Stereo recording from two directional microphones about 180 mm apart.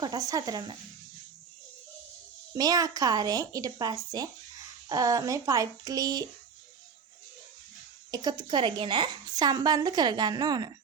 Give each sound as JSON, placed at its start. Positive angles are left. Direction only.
{"t": 0.0, "sound": "a woman's voice", "side_deg": -20}
{"t": 2.6, "sound": "a woman's voice", "side_deg": -20}
{"t": 8.1, "sound": "a woman's voice", "side_deg": -20}